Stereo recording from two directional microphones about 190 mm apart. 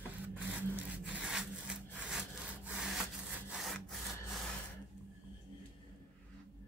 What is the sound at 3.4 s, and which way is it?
Wood, centre (ahead or behind).